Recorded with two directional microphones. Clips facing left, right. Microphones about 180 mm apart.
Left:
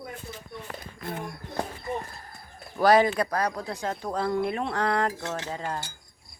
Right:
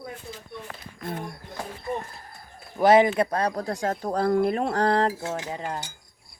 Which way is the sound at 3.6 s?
45° right (ahead or behind).